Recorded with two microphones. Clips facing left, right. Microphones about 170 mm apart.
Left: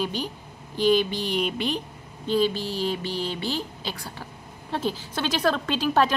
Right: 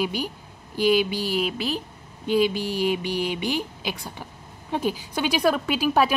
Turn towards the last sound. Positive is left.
turn(degrees=-10)  # may be behind; listen again after turning